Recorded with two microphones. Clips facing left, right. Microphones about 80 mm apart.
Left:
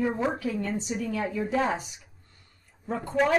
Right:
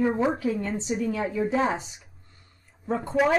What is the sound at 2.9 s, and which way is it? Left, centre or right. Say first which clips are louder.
Speech: right 4 dB; right.